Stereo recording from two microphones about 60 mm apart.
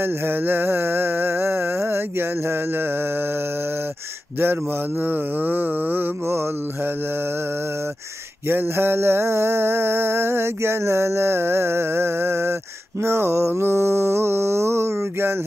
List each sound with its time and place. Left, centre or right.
0.0 s music: right
4.4 s a sound: right
8.5 s music: right
13.0 s mantra: right